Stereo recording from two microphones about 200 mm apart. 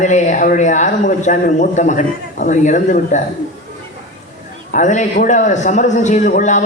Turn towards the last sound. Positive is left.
turn(degrees=40)  # may be behind; listen again after turning